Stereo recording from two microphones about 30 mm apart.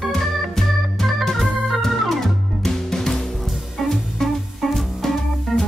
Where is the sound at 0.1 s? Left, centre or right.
Centre.